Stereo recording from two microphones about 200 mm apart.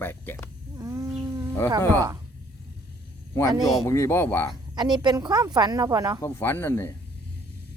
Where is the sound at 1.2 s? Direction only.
20° right (ahead or behind).